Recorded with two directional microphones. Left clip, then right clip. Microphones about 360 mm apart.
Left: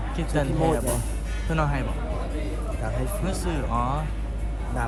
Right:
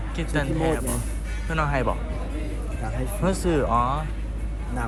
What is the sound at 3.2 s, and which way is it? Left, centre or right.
Speech, centre.